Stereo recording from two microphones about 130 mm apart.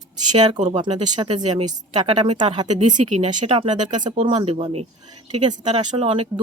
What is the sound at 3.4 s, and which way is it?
Speech, 45° right (ahead or behind).